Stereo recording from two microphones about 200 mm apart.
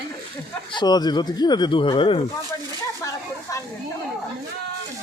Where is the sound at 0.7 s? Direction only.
20° left (ahead or behind).